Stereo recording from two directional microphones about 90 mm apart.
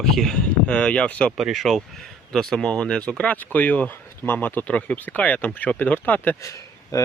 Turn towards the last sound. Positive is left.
turn(degrees=35)  # may be behind; listen again after turning